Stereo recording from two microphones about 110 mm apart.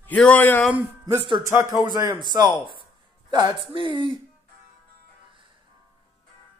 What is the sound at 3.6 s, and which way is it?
Speech, 50° right (ahead or behind).